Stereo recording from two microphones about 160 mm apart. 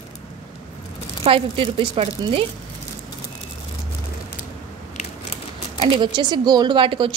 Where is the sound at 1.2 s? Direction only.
35° right (ahead or behind).